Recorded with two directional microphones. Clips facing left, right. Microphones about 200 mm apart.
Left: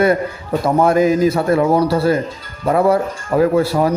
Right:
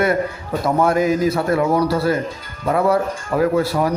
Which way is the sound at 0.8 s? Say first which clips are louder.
Left 4 dB; 25° left (ahead or behind).